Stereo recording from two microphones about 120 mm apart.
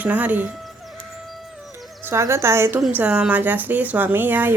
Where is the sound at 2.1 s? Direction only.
20° right (ahead or behind).